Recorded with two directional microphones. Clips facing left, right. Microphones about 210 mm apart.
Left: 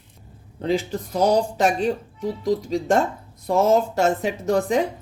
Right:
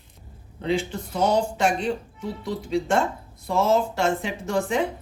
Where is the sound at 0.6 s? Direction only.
40° left (ahead or behind).